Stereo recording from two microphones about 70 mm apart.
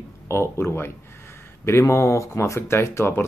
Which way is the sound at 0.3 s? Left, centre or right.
Left.